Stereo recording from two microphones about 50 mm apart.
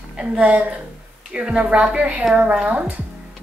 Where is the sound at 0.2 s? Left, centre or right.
Right.